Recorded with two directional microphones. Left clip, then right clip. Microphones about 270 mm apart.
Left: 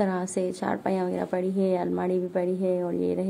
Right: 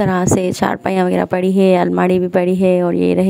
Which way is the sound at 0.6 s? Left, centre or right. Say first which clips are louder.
Right 11 dB; right.